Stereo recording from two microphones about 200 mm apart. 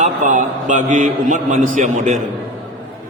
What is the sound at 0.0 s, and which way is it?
A man's voice, 40° right (ahead or behind).